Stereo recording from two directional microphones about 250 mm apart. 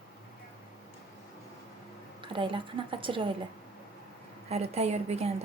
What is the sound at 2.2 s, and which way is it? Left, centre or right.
A woman's voice, centre.